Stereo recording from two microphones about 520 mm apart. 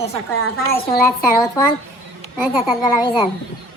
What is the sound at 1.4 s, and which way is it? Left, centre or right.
A woman's voice, centre.